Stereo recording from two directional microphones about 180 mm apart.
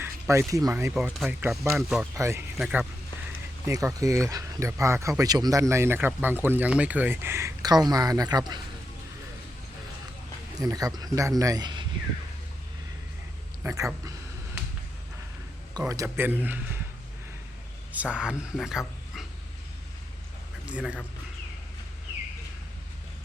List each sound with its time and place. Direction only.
0.0 s speech: 15° right (ahead or behind)
2.1 s speech: 15° right (ahead or behind)
2.6 s speech: 5° right (ahead or behind)
3.7 s speech: 20° right (ahead or behind)
10.6 s speech: 20° right (ahead or behind)
13.6 s speech: 20° right (ahead or behind)
16.0 s speech: 10° right (ahead or behind)
17.9 s speech: 5° right (ahead or behind)
20.7 s a man's voice: 5° right (ahead or behind)